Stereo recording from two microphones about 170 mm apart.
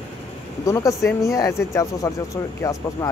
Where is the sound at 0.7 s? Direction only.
20° left (ahead or behind).